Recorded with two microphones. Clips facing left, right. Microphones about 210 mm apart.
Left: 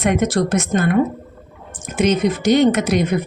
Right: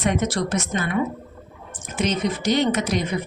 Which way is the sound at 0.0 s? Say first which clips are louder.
Left 5 dB; 55° left (ahead or behind).